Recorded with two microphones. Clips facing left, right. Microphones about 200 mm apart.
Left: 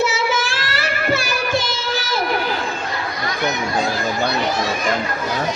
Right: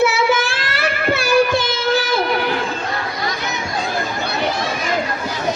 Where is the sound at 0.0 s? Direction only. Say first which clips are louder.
Right 4 dB; 55° right (ahead or behind).